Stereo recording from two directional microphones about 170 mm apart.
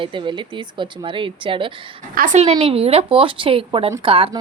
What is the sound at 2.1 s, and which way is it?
Speech, 45° right (ahead or behind).